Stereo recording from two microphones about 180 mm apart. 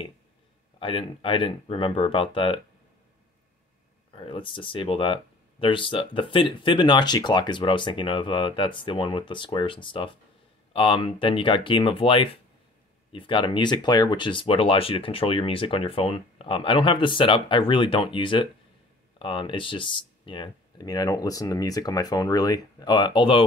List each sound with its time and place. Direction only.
0.7 s speech: 30° left (ahead or behind)
4.1 s speech: 30° left (ahead or behind)